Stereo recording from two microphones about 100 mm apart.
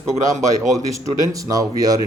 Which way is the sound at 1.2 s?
35° right (ahead or behind).